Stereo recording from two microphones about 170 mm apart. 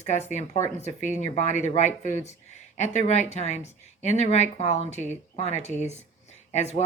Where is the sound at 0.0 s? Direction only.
40° left (ahead or behind).